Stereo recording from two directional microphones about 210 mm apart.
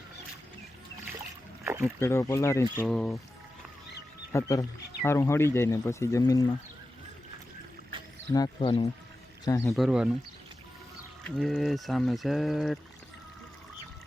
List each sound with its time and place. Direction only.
1.6 s a sound: 10° right (ahead or behind)
2.0 s speech: 10° left (ahead or behind)
4.3 s speech: 15° left (ahead or behind)
8.3 s speech: 20° left (ahead or behind)
9.7 s speech: centre (ahead or behind)
11.3 s speech: centre (ahead or behind)